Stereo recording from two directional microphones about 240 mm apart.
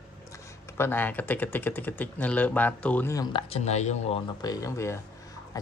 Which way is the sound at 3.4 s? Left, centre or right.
Left.